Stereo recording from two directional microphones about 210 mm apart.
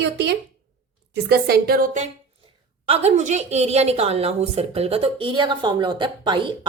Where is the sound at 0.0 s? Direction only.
55° right (ahead or behind).